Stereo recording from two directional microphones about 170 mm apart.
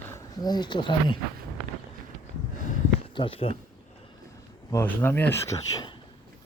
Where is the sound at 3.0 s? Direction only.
30° left (ahead or behind).